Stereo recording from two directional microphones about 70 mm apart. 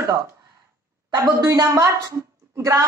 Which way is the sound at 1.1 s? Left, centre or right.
Right.